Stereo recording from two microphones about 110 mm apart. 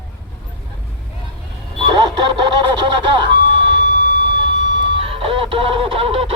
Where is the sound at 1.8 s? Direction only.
40° right (ahead or behind).